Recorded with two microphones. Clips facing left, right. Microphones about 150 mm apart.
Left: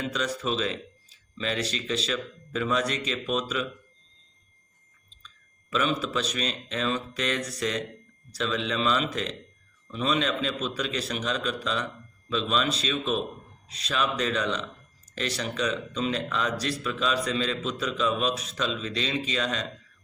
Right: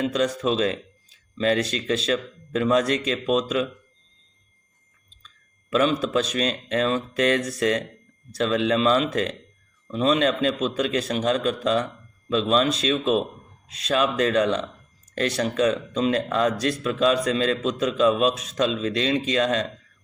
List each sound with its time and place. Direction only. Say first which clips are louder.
0.2 s speech: right 6 dB; 45° right (ahead or behind)
5.7 s speech: right 6 dB; 50° right (ahead or behind)
9.9 s speech: right 6 dB; 40° right (ahead or behind)